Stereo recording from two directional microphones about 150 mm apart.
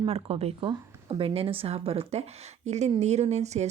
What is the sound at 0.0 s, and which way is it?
A woman's voice, 40° right (ahead or behind).